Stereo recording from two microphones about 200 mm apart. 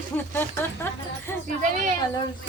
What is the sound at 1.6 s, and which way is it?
Speech, 40° right (ahead or behind).